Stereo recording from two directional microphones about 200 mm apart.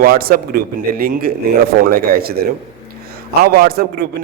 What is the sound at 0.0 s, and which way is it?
A man's voice, 45° right (ahead or behind).